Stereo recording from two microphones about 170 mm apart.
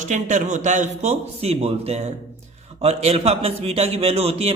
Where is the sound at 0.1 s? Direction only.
45° right (ahead or behind).